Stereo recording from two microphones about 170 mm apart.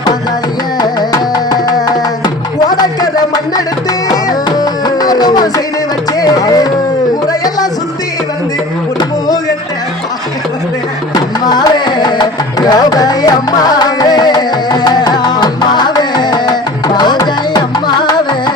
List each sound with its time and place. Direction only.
0.8 s music: 25° left (ahead or behind)
11.1 s music: 25° left (ahead or behind)